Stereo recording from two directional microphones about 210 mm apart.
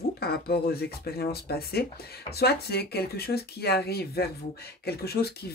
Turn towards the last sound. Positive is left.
turn(degrees=50)  # may be behind; listen again after turning